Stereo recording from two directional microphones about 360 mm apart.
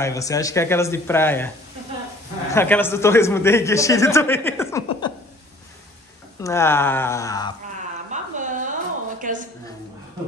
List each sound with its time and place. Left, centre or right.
0.0 s speech: centre
2.5 s speech: centre
6.4 s speech: centre
8.1 s a sound: right